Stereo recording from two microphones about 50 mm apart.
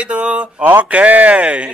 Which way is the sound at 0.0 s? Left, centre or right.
Right.